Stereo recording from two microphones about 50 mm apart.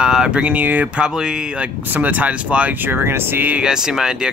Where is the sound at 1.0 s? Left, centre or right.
Centre.